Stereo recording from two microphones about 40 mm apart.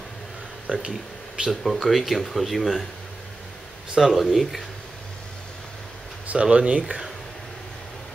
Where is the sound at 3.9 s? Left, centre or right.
Centre.